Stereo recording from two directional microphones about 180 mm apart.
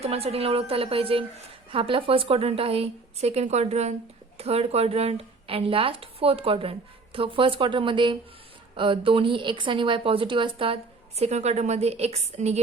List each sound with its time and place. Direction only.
0.0 s a woman's voice: 35° right (ahead or behind)